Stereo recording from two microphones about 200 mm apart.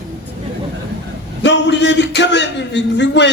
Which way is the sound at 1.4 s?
60° left (ahead or behind).